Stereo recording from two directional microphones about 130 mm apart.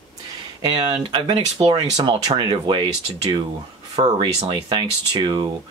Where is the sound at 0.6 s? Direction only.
35° right (ahead or behind).